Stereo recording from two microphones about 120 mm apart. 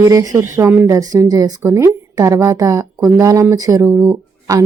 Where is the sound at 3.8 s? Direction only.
15° right (ahead or behind).